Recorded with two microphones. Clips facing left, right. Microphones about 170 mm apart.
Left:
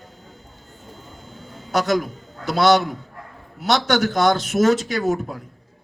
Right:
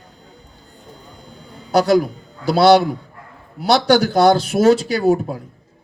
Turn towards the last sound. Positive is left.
turn(degrees=-30)  # may be behind; listen again after turning